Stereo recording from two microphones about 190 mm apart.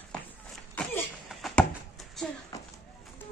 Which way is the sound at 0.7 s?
5° left (ahead or behind).